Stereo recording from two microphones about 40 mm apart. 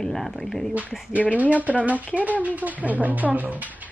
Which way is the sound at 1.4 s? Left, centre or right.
Right.